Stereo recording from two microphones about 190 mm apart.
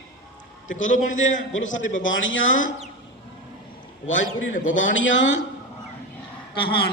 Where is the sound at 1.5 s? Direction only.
90° left.